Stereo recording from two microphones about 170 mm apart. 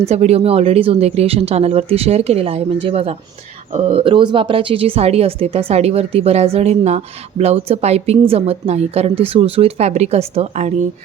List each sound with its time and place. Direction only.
0.1 s speech: 40° right (ahead or behind)